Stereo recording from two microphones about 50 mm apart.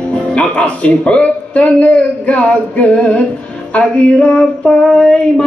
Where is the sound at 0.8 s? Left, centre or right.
Left.